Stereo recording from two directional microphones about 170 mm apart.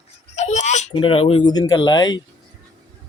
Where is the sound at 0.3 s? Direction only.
45° left (ahead or behind); by 2.2 s 25° left (ahead or behind).